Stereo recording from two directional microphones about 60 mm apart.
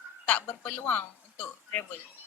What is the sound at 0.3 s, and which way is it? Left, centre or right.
A woman's voice, left.